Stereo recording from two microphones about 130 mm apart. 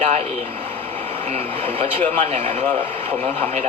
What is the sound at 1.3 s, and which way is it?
A man's voice, 50° right (ahead or behind).